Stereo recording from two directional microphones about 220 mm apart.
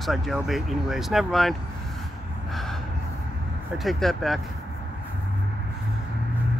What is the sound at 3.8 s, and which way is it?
Speech, centre (ahead or behind).